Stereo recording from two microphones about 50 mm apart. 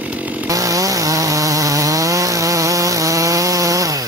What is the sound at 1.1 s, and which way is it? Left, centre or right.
Chainsaw, right.